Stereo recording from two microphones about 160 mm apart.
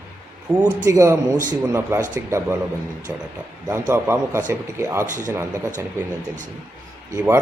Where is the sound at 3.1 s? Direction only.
15° right (ahead or behind).